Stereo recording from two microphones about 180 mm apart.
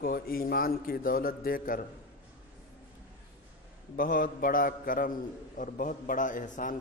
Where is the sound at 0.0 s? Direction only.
55° left (ahead or behind).